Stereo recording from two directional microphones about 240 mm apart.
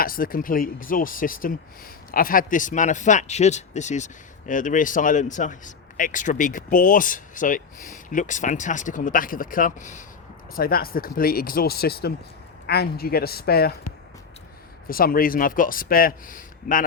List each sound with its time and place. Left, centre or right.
0.0 s speech: left
14.8 s speech: left